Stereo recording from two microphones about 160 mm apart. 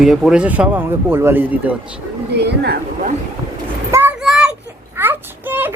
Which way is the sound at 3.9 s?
10° right (ahead or behind).